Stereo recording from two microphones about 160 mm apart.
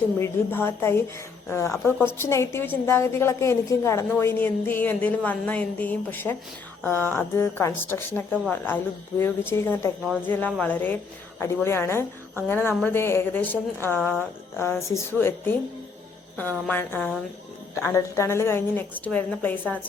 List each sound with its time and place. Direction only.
0.2 s a woman's voice: 15° left (ahead or behind)